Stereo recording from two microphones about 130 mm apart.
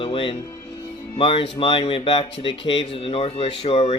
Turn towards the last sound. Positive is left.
turn(degrees=40)  # may be behind; listen again after turning